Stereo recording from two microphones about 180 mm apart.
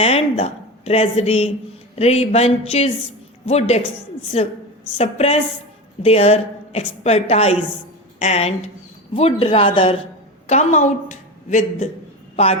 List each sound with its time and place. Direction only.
0.0 s a woman's voice: 35° left (ahead or behind)
10.4 s a woman's voice: 40° left (ahead or behind)